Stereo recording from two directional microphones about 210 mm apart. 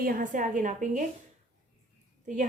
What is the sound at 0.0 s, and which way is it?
A woman's voice, 40° right (ahead or behind).